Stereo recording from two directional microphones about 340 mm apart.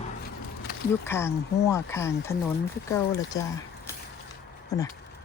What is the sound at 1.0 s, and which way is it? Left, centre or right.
Speech, centre.